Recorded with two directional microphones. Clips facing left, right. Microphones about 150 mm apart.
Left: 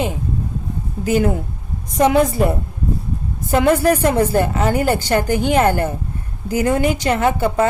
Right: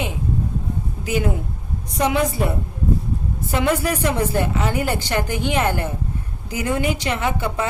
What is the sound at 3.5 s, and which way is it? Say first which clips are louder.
A woman's voice: left 7 dB; 45° left (ahead or behind).